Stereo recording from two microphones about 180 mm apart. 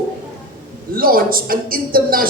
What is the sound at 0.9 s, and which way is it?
A man's voice, 55° right (ahead or behind).